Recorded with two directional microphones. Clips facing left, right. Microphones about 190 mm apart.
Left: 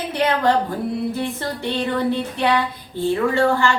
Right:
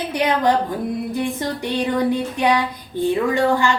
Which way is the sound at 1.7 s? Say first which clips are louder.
Right 2 dB; 15° right (ahead or behind).